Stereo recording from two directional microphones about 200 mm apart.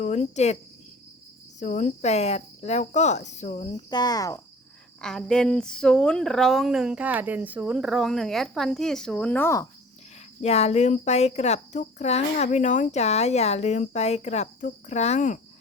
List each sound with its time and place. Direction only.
0.0 s speech: 35° left (ahead or behind)
1.5 s speech: 35° left (ahead or behind)
3.8 s speech: 20° left (ahead or behind)
4.9 s speech: 5° left (ahead or behind)
10.4 s speech: 30° left (ahead or behind)